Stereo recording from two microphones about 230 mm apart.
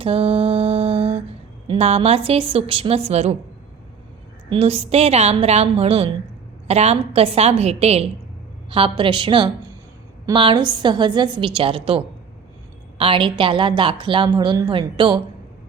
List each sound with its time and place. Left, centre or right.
0.0 s mantra: right
1.6 s a woman's voice: right
4.4 s a woman's voice: right